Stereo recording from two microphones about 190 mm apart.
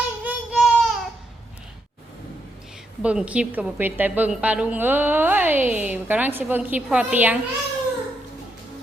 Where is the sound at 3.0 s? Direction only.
5° right (ahead or behind).